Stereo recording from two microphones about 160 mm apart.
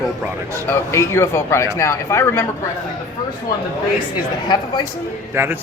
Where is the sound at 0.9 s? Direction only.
15° left (ahead or behind).